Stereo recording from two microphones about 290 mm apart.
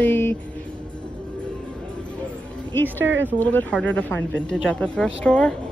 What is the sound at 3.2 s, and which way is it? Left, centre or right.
Speech, centre.